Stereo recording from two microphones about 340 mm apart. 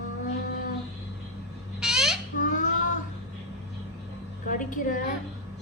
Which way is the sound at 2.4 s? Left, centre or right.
Left.